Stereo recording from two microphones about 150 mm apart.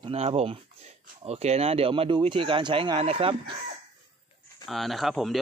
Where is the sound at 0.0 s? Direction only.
40° right (ahead or behind).